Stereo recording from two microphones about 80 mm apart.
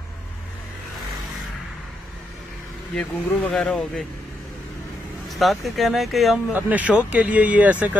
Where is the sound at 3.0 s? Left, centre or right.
Centre.